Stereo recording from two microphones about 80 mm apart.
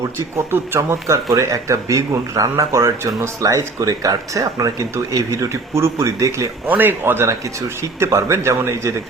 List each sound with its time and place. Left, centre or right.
0.0 s speech: right
6.7 s speech: right